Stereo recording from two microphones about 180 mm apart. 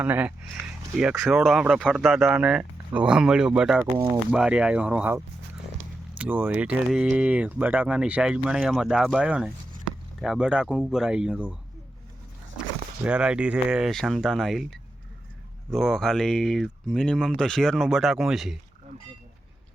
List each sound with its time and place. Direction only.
0.0 s speech: 10° right (ahead or behind)
3.9 s speech: 20° right (ahead or behind)
4.3 s speech: 5° right (ahead or behind)
13.1 s speech: 5° right (ahead or behind)